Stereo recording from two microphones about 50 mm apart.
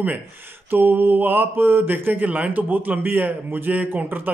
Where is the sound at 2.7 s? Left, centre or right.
Right.